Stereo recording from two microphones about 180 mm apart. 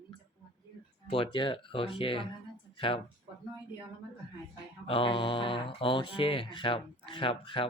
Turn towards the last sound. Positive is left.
turn(degrees=30)  # may be behind; listen again after turning